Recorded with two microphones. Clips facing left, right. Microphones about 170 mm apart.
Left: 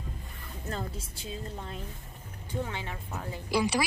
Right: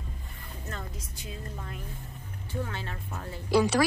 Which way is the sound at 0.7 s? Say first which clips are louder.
Left 5 dB; 30° left (ahead or behind).